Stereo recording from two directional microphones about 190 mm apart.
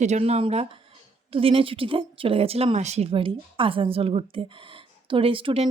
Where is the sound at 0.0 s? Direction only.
35° right (ahead or behind).